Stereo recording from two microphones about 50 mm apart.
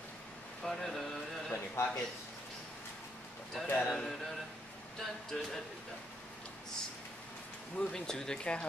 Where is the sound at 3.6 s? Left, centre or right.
Left.